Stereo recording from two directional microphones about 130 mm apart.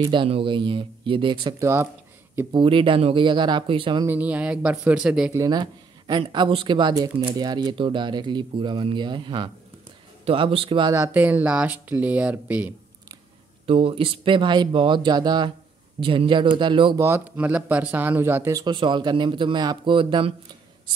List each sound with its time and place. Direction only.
0.0 s a man's voice: 45° right (ahead or behind)
1.6 s speech: 20° right (ahead or behind)
2.5 s a man's voice: 40° right (ahead or behind)
4.0 s speech: 15° right (ahead or behind)
5.3 s a man's voice: 30° right (ahead or behind)
7.0 s speech: 20° right (ahead or behind)
7.3 s a man's voice: 30° right (ahead or behind)
10.9 s speech: 20° right (ahead or behind)
13.7 s a man's voice: 45° right (ahead or behind)
17.0 s a man's voice: 15° right (ahead or behind); by 20.3 s 40° right (ahead or behind)